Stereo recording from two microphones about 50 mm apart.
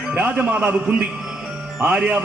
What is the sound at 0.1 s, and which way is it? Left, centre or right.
A woman's voice, right.